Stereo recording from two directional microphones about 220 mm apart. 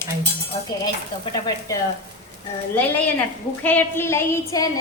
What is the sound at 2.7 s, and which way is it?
A woman's voice, 10° left (ahead or behind).